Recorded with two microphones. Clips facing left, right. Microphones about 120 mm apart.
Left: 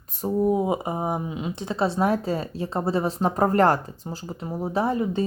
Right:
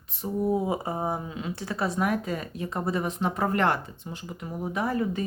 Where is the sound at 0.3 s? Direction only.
20° left (ahead or behind).